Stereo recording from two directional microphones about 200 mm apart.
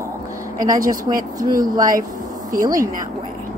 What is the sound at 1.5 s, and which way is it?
Speech, 20° right (ahead or behind).